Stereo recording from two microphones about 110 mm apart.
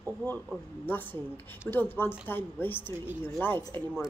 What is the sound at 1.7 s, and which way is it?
A woman's voice, 20° left (ahead or behind).